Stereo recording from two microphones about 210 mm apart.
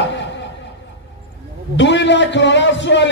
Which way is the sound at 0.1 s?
60° left (ahead or behind).